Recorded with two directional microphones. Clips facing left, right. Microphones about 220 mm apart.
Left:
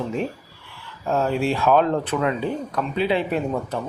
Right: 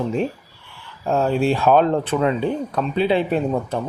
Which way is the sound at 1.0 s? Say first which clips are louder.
Right 3 dB; 35° right (ahead or behind).